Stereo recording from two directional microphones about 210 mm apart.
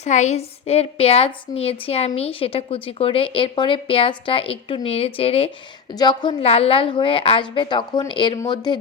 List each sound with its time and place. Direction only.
0.0 s a woman's voice: 35° left (ahead or behind)